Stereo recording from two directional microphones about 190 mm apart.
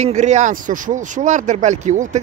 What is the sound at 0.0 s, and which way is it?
Speech, 35° right (ahead or behind).